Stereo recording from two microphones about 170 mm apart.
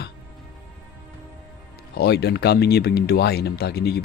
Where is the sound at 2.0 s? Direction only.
75° left (ahead or behind).